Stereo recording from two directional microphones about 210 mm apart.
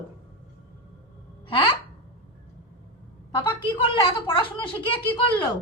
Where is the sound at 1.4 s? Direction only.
25° left (ahead or behind).